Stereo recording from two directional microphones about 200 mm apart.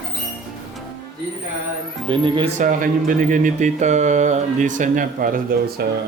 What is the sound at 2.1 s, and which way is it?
Speech, 25° right (ahead or behind).